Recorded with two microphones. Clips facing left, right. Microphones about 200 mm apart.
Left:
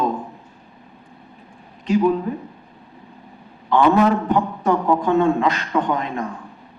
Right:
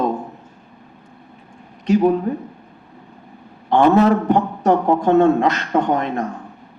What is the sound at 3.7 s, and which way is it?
Speech, 45° right (ahead or behind).